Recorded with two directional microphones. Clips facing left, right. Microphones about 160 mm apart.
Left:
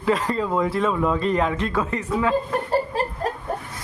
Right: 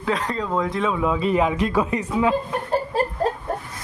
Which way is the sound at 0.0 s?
Centre (ahead or behind).